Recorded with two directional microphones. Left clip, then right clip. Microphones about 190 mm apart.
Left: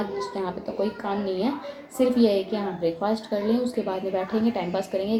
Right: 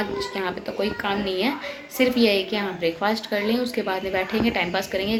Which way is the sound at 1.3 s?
5° left (ahead or behind).